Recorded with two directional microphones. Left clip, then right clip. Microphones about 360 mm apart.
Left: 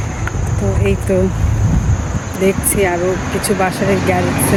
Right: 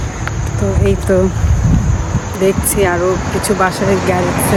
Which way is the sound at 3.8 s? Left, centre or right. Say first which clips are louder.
Right 1 dB; right.